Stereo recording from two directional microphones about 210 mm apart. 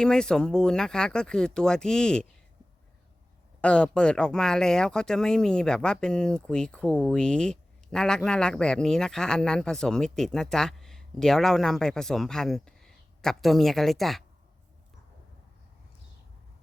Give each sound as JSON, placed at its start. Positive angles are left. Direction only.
{"t": 0.0, "sound": "speech", "side_deg": 5}
{"t": 3.6, "sound": "speech", "side_deg": 5}